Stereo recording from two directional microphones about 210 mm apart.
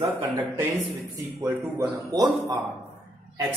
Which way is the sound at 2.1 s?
20° right (ahead or behind).